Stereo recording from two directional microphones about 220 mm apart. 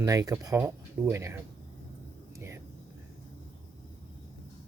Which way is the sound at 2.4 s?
10° right (ahead or behind).